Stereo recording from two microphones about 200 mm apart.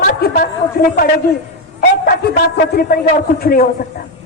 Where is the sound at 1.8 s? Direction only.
50° left (ahead or behind).